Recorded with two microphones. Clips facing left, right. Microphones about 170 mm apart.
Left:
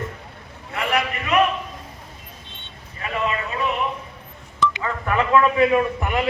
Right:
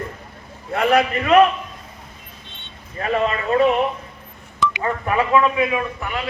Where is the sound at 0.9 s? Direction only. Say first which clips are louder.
Right 6 dB; 55° right (ahead or behind).